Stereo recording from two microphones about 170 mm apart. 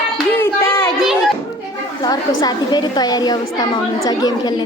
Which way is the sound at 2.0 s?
25° left (ahead or behind).